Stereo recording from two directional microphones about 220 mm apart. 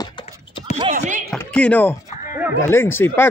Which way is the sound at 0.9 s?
35° right (ahead or behind).